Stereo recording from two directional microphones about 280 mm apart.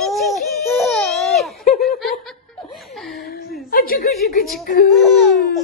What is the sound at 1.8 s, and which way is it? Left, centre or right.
Laughter, centre.